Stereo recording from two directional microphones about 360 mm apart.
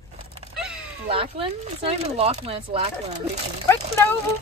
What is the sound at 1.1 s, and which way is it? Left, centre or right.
Speech, centre.